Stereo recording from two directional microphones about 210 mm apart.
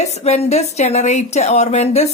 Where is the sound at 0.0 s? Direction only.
30° left (ahead or behind).